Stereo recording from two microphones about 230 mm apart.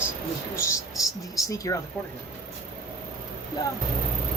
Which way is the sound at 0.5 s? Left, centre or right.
Centre.